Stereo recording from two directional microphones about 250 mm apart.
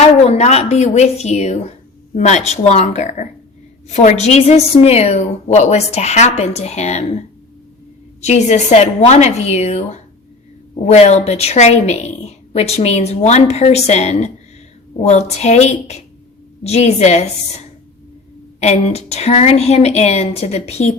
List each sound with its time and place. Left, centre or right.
0.0 s a woman's voice: left
8.2 s a woman's voice: left
18.6 s a woman's voice: left